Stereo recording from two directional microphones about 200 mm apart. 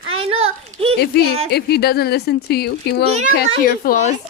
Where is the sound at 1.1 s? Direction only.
50° left (ahead or behind).